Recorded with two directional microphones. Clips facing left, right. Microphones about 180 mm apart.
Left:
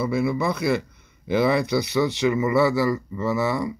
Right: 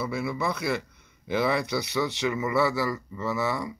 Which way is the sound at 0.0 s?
20° left (ahead or behind).